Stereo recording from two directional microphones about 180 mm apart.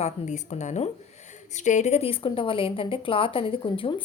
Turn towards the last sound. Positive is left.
turn(degrees=30)  # may be behind; listen again after turning